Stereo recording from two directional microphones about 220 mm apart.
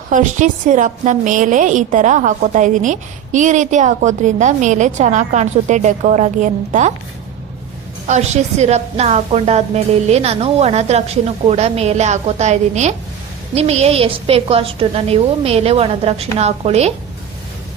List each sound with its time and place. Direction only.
0.1 s a woman's voice: 35° right (ahead or behind)
8.0 s a woman's voice: 30° right (ahead or behind)